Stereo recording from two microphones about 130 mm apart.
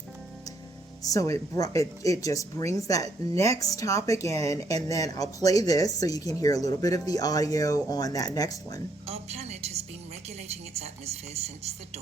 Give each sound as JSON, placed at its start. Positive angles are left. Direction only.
{"t": 1.0, "sound": "speech", "side_deg": 25}
{"t": 9.0, "sound": "speech", "side_deg": -55}